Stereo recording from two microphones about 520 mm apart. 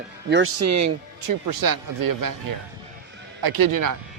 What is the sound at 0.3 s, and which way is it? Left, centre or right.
Speech, right.